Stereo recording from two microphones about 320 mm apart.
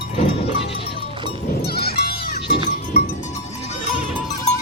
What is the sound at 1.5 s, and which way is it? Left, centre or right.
Goat, left.